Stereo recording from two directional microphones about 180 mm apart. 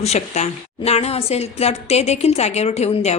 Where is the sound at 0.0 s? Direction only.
35° left (ahead or behind).